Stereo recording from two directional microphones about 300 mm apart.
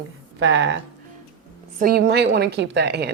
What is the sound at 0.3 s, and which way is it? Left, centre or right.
Speech, right.